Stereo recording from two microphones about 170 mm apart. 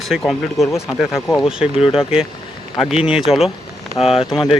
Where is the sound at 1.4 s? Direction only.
5° right (ahead or behind).